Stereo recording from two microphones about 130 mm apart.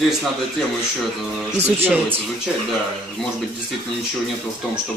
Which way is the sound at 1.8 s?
15° right (ahead or behind).